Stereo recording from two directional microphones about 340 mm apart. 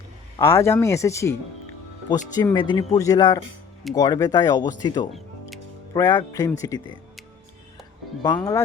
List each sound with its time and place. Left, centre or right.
0.3 s speech: centre
8.2 s speech: centre